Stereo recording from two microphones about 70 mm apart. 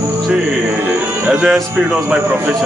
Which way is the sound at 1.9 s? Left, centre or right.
Right.